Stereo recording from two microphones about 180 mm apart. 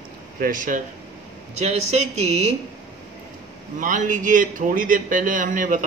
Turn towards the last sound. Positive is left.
turn(degrees=-45)  # may be behind; listen again after turning